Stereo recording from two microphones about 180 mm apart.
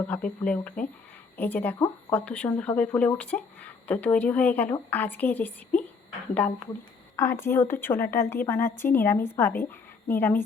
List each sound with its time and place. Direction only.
0.1 s speech: 5° left (ahead or behind)
7.2 s speech: 15° left (ahead or behind)